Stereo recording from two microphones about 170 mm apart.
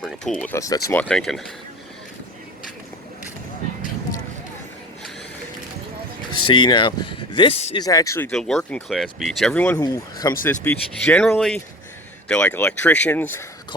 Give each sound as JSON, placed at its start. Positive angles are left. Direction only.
{"t": 0.0, "sound": "speech", "side_deg": 0}
{"t": 0.5, "sound": "speech", "side_deg": 20}
{"t": 6.3, "sound": "speech", "side_deg": 25}
{"t": 7.8, "sound": "speech", "side_deg": 20}
{"t": 8.3, "sound": "speech", "side_deg": 0}
{"t": 9.8, "sound": "speech", "side_deg": 20}
{"t": 10.4, "sound": "speech", "side_deg": 10}